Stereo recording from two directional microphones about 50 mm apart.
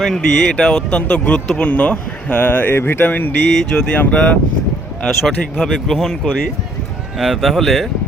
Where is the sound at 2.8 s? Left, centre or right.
Left.